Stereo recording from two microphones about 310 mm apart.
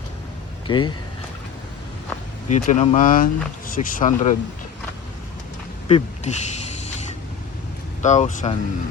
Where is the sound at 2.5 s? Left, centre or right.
Left.